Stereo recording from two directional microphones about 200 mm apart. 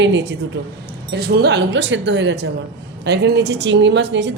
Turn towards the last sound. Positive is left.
turn(degrees=-60)  # may be behind; listen again after turning